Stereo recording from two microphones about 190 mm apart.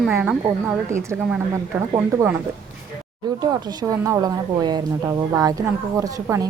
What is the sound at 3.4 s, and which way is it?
A woman's voice, 20° right (ahead or behind).